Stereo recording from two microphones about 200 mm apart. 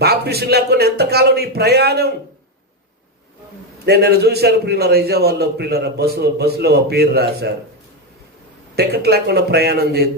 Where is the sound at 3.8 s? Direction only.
55° right (ahead or behind).